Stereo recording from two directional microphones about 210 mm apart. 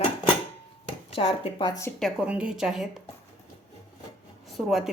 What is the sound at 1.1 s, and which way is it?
Speech, 25° left (ahead or behind).